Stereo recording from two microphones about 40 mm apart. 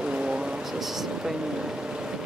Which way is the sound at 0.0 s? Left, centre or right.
Right.